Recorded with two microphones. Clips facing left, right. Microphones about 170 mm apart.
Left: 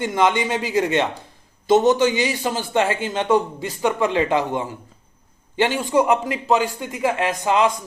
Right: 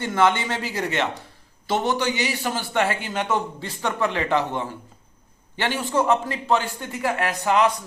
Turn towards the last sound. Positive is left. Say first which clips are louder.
# left 2 dB
turn(degrees=20)  # may be behind; listen again after turning